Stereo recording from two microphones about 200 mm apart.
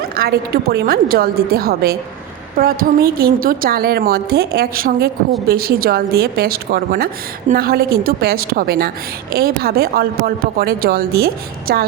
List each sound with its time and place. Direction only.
0.2 s a woman's voice: 50° right (ahead or behind)